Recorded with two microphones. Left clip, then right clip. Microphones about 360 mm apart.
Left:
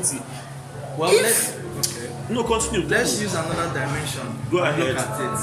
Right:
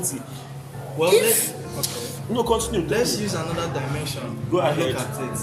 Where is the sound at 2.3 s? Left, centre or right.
Centre.